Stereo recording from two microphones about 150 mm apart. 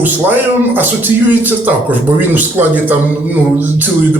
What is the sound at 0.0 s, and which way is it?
Speech, 10° right (ahead or behind).